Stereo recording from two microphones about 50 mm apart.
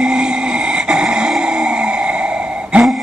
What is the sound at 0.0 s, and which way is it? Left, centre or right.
Music, centre.